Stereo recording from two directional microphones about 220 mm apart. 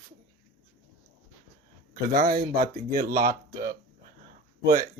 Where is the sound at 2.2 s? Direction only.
40° right (ahead or behind).